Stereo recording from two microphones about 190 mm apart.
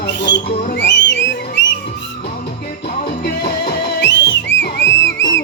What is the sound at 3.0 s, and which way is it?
Music, 55° left (ahead or behind).